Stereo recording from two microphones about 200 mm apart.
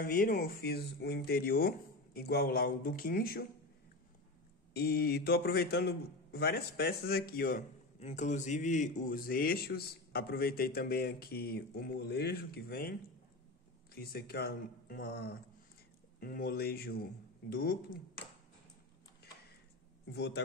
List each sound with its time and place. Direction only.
0.0 s a man's voice: 45° left (ahead or behind)
4.7 s a man's voice: 50° left (ahead or behind)
13.9 s a man's voice: 50° left (ahead or behind)
20.1 s speech: 55° left (ahead or behind)